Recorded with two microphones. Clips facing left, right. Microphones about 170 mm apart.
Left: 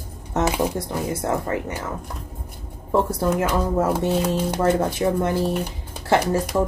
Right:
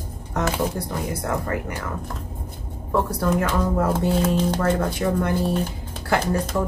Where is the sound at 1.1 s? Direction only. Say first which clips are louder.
Left 3 dB; 25° left (ahead or behind).